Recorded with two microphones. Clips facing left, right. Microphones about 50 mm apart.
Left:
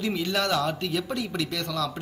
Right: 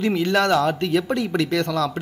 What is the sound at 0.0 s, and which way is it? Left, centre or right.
A man's voice, right.